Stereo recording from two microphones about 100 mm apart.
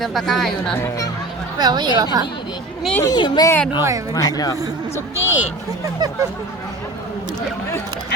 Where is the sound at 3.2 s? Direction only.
50° left (ahead or behind).